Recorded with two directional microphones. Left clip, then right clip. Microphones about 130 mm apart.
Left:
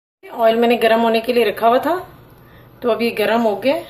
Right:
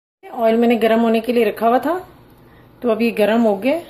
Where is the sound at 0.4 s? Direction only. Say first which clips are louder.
Left 1 dB; 40° right (ahead or behind).